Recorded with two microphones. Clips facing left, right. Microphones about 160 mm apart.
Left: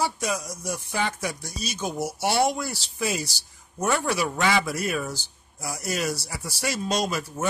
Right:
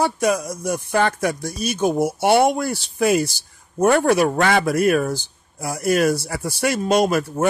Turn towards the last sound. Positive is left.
turn(degrees=-55)  # may be behind; listen again after turning